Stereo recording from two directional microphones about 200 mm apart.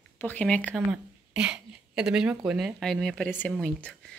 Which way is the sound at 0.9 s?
5° right (ahead or behind).